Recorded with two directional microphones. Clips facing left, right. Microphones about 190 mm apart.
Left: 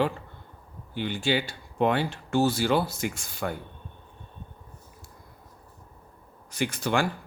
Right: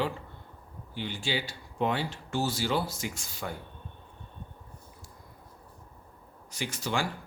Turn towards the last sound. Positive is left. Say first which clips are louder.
# left 6 dB
turn(degrees=60)  # may be behind; listen again after turning